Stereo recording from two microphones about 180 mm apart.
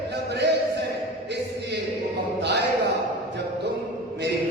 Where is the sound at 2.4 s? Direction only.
70° right (ahead or behind).